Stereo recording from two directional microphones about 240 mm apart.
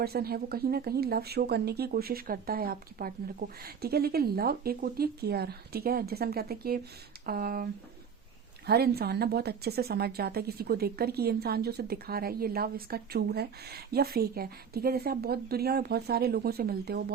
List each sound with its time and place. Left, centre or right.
0.0 s a woman's voice: right